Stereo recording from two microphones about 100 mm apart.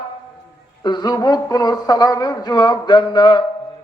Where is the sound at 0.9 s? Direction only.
45° left (ahead or behind).